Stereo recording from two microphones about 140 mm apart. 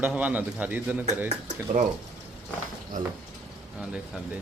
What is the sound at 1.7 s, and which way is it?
Speech, 70° right (ahead or behind).